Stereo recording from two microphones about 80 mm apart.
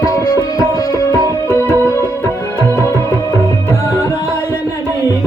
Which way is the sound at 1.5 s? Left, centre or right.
Left.